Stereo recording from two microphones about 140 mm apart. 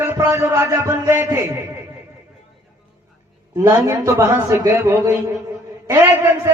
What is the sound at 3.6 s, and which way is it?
A man's voice, 20° right (ahead or behind).